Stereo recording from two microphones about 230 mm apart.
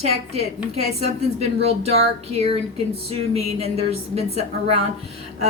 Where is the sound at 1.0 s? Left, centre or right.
Right.